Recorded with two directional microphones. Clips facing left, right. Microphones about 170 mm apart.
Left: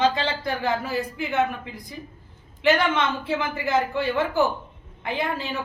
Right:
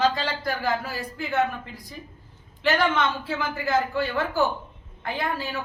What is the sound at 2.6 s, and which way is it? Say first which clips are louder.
A woman's voice: left 2 dB; 20° left (ahead or behind).